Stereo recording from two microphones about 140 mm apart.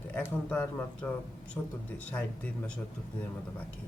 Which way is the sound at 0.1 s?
10° left (ahead or behind).